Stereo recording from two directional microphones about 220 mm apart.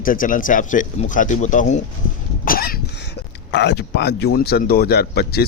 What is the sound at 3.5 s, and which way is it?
Speech, 50° left (ahead or behind).